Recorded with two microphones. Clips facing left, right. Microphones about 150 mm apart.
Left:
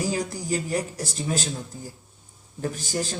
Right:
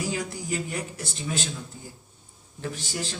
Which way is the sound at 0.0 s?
40° left (ahead or behind).